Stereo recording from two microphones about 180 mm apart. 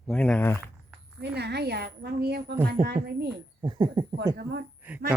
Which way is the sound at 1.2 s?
65° right (ahead or behind).